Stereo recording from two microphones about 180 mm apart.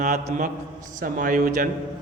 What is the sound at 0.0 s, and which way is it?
A man's voice, 45° right (ahead or behind).